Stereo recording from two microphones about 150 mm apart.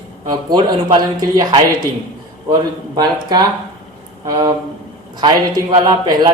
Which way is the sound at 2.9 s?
25° right (ahead or behind).